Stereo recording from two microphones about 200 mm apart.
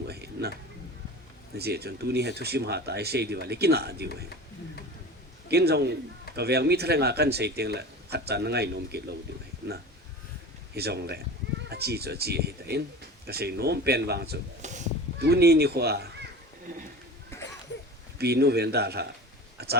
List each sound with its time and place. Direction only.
0.1 s a sound: 55° right (ahead or behind)
1.5 s a man's voice: 55° right (ahead or behind)
5.5 s a man's voice: 55° right (ahead or behind)
10.8 s a man's voice: 55° right (ahead or behind)
14.6 s honk: 35° right (ahead or behind)
15.2 s a man's voice: 50° right (ahead or behind)
18.2 s a man's voice: 55° right (ahead or behind)